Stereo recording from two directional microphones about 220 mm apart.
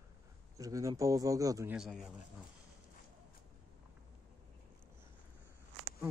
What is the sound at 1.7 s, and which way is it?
Speech, centre (ahead or behind).